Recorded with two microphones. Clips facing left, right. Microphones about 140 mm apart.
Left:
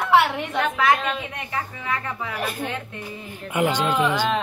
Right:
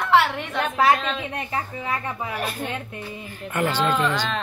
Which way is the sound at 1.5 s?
25° right (ahead or behind).